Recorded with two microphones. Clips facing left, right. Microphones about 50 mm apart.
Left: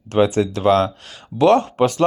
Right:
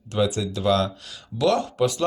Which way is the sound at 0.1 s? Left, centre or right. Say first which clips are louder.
Left 7 dB; left.